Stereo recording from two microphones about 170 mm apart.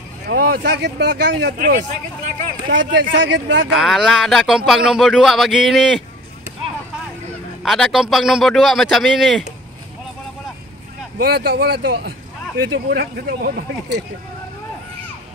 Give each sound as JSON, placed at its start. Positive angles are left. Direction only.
{"t": 0.3, "sound": "speech", "side_deg": -70}
{"t": 1.6, "sound": "speech", "side_deg": -50}
{"t": 2.7, "sound": "a man's voice", "side_deg": -90}
{"t": 3.7, "sound": "speech", "side_deg": 0}
{"t": 7.6, "sound": "speech", "side_deg": 0}
{"t": 11.1, "sound": "speech", "side_deg": -65}